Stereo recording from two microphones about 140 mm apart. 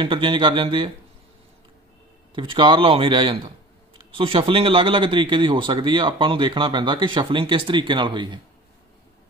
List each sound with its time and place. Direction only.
0.0 s speech: 35° right (ahead or behind)
2.3 s speech: 35° right (ahead or behind)